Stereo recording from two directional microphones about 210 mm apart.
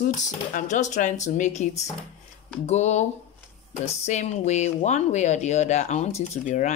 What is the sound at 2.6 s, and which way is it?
Speech, 35° left (ahead or behind).